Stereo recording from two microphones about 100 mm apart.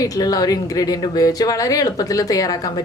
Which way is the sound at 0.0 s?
40° left (ahead or behind).